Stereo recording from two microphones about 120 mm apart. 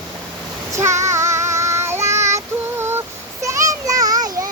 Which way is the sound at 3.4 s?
25° right (ahead or behind).